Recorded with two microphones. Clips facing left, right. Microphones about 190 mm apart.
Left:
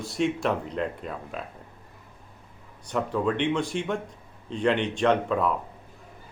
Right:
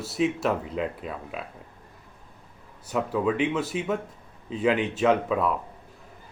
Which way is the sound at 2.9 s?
5° right (ahead or behind).